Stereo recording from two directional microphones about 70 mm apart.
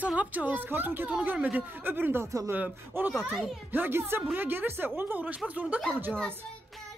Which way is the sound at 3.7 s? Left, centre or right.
Right.